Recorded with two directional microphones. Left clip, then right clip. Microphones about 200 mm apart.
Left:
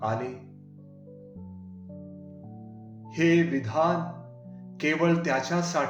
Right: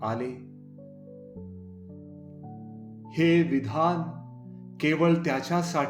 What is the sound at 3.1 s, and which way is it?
Speech, 45° right (ahead or behind).